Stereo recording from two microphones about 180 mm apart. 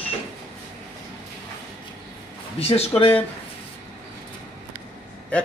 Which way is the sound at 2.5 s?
35° left (ahead or behind).